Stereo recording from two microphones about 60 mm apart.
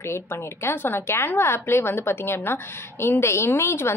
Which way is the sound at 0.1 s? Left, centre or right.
Left.